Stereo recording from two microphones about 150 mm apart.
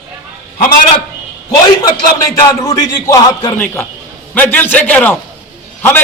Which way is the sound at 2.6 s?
20° left (ahead or behind).